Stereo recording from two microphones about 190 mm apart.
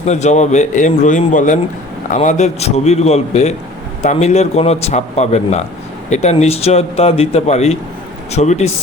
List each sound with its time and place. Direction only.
0.0 s a man's voice: 35° left (ahead or behind)